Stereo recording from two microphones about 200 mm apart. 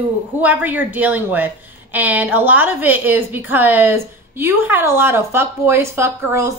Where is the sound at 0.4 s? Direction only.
10° right (ahead or behind).